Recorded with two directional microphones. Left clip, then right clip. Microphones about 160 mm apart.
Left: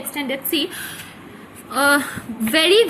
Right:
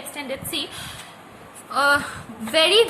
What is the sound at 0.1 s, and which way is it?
A woman's voice, 15° left (ahead or behind).